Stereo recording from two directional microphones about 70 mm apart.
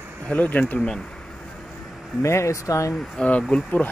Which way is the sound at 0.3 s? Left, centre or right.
Centre.